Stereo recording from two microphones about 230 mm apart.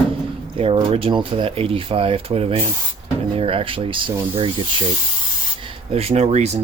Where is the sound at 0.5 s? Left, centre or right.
Right.